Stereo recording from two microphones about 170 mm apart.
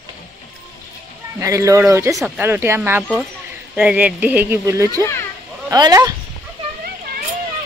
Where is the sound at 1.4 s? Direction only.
20° right (ahead or behind).